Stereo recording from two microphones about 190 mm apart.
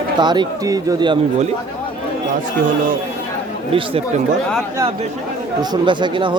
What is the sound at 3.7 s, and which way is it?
Speech, 30° right (ahead or behind).